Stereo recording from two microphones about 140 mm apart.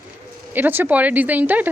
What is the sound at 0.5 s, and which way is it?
A woman's voice, 15° right (ahead or behind).